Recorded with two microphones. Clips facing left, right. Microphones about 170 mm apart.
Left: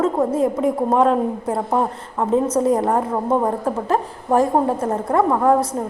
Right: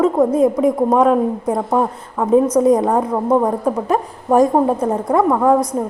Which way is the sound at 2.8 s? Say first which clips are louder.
Right 3 dB; centre (ahead or behind).